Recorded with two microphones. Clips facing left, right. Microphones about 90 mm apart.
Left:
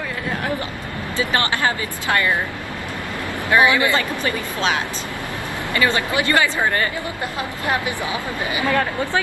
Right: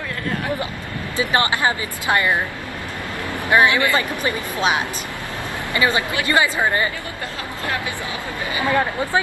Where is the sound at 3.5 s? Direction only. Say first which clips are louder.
Even; 20° right (ahead or behind).